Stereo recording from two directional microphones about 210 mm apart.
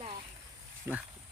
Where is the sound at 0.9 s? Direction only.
10° right (ahead or behind).